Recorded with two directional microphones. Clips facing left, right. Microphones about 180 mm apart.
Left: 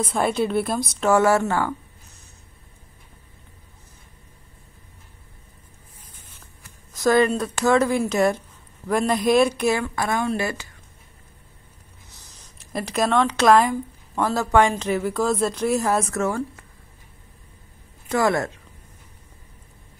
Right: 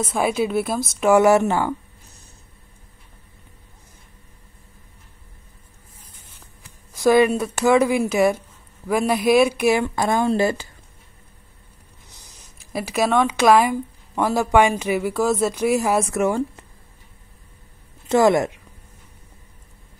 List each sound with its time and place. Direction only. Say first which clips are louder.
0.1 s speech: right 1 dB; 5° right (ahead or behind)
6.6 s speech: right 3 dB; 10° right (ahead or behind); by 10.7 s 30° right (ahead or behind)
12.1 s a sound: right 1 dB; 15° right (ahead or behind)
12.5 s speech: right 2 dB; 5° right (ahead or behind)
18.0 s speech: right 5 dB; 20° right (ahead or behind)